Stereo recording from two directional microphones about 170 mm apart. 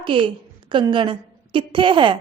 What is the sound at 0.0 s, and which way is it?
A woman's voice, 30° right (ahead or behind).